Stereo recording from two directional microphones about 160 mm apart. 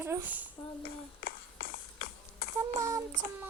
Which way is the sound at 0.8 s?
65° left (ahead or behind).